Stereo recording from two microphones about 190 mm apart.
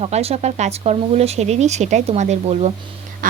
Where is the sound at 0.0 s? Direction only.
30° right (ahead or behind).